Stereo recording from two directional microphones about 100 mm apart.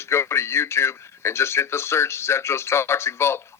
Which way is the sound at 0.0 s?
25° left (ahead or behind).